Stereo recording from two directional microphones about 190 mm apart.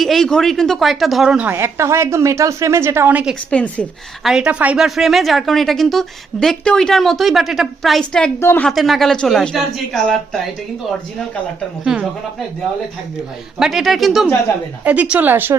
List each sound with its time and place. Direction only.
0.0 s speech: centre (ahead or behind)
3.5 s a woman's voice: 5° left (ahead or behind)
13.6 s a woman's voice: centre (ahead or behind)